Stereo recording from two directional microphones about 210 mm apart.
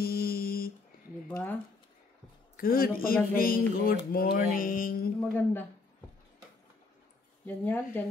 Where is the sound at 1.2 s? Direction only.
10° left (ahead or behind).